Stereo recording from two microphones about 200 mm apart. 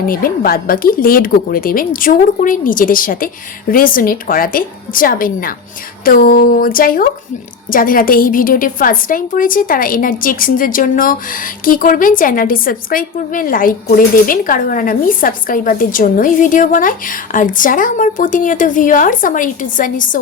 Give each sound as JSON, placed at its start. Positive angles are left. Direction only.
{"t": 0.0, "sound": "a woman's voice", "side_deg": 45}